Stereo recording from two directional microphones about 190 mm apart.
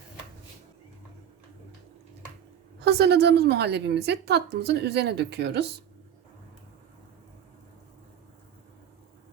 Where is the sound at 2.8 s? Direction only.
60° right (ahead or behind).